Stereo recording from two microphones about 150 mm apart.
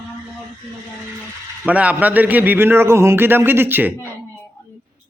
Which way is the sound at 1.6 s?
10° right (ahead or behind).